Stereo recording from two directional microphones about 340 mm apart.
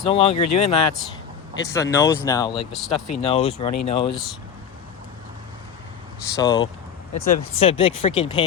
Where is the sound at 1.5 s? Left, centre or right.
Centre.